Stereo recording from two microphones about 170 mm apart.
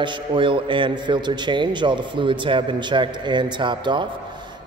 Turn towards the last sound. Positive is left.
turn(degrees=-25)  # may be behind; listen again after turning